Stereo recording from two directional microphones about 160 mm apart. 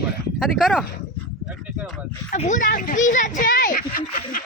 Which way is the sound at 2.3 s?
50° left (ahead or behind).